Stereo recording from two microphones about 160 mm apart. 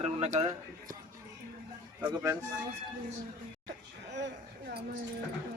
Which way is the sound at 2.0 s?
20° right (ahead or behind).